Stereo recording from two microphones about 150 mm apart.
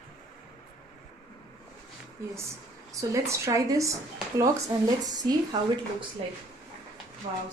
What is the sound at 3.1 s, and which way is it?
Speech, 20° right (ahead or behind).